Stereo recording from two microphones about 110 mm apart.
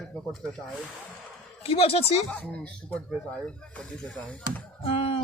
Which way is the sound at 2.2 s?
10° left (ahead or behind).